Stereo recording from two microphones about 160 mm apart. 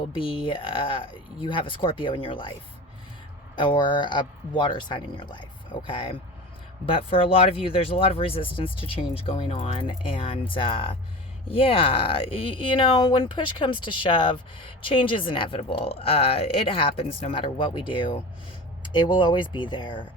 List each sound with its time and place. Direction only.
0.1 s speech: 35° left (ahead or behind)
3.5 s speech: 30° left (ahead or behind)